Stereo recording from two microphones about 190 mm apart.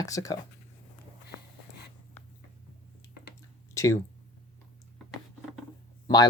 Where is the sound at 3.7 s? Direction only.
15° left (ahead or behind).